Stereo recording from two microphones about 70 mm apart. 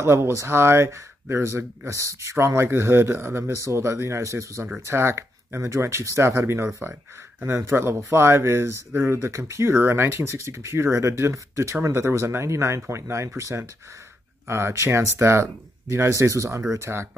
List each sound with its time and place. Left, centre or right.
0.0 s speech: right